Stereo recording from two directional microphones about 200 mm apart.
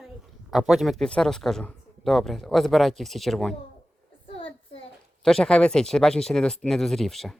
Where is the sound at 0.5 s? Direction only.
Centre (ahead or behind).